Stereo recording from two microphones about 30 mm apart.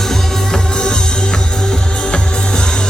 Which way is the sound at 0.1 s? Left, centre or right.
Left.